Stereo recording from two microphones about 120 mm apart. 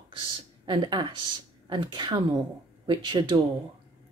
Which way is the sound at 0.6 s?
40° right (ahead or behind).